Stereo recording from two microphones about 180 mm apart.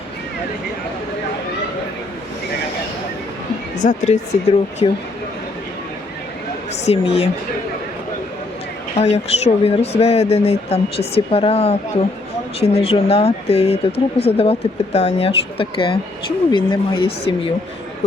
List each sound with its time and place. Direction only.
3.8 s speech: 40° left (ahead or behind)
6.8 s speech: 35° left (ahead or behind)
9.0 s speech: 35° left (ahead or behind)